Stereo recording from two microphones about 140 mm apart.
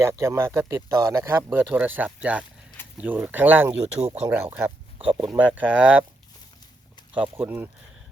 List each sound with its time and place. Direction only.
0.0 s speech: 20° right (ahead or behind)
1.4 s speech: 15° right (ahead or behind)
7.1 s speech: 10° right (ahead or behind)